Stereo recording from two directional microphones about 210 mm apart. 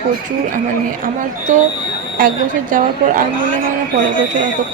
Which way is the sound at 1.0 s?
35° right (ahead or behind).